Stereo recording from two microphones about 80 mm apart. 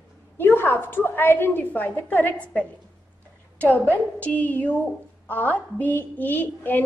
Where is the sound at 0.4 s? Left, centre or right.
Left.